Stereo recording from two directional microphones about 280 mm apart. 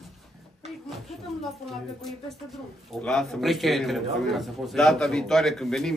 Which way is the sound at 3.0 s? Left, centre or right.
Centre.